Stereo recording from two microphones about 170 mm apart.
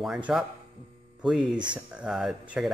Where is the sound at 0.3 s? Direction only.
5° right (ahead or behind).